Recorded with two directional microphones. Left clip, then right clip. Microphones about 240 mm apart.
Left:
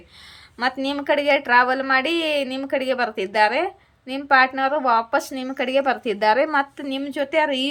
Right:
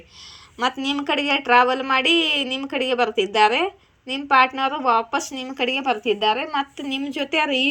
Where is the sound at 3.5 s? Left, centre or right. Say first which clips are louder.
Right 1 dB; centre.